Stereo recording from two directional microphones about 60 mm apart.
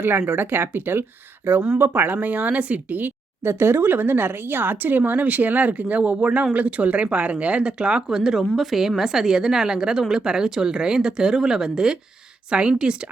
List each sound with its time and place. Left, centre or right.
0.3 s speech: right
3.4 s speech: right; by 13.1 s centre